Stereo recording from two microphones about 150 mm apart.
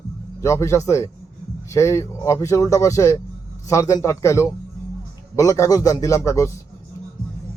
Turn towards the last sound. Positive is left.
turn(degrees=20)  # may be behind; listen again after turning